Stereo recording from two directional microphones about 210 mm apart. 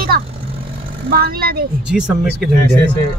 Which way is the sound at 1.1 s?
45° right (ahead or behind).